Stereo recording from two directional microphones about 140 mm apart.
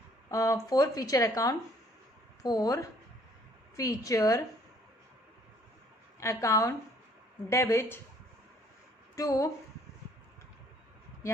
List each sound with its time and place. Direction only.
0.3 s speech: 20° left (ahead or behind)
6.1 s speech: 20° left (ahead or behind)
9.1 s speech: 25° left (ahead or behind)